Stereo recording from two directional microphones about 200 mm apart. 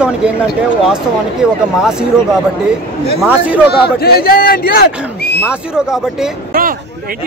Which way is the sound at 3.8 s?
50° left (ahead or behind).